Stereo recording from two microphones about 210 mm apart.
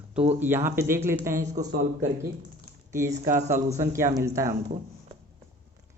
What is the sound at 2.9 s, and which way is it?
Speech, 15° right (ahead or behind).